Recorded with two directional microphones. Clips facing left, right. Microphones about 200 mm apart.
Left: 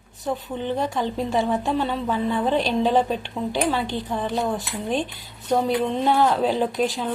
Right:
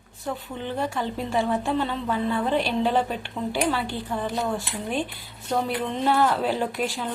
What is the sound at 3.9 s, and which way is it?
Speech, 20° left (ahead or behind).